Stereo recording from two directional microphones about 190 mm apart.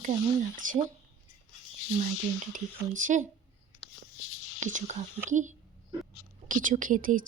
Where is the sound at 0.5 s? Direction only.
45° right (ahead or behind).